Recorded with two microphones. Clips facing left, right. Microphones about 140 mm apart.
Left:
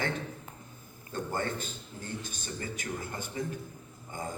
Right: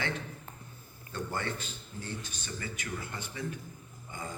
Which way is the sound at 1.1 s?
45° left (ahead or behind).